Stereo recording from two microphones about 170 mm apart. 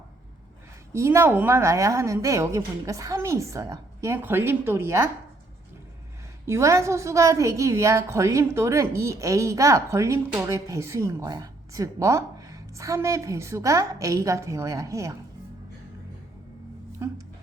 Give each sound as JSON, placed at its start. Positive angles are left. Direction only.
{"t": 0.9, "sound": "a woman's voice", "side_deg": -15}
{"t": 6.4, "sound": "a woman's voice", "side_deg": -15}
{"t": 17.0, "sound": "a woman's voice", "side_deg": -15}